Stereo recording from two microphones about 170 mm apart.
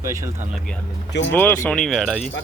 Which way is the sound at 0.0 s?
20° right (ahead or behind).